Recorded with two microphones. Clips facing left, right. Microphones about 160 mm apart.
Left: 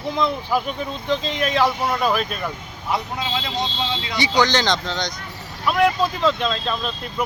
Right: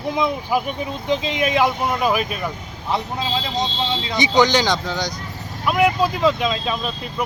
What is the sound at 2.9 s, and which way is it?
Speech, 30° right (ahead or behind).